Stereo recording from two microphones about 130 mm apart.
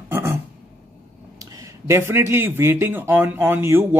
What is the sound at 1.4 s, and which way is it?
Speech, 25° right (ahead or behind).